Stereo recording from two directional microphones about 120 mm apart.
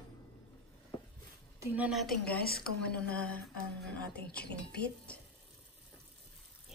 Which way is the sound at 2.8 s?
10° left (ahead or behind).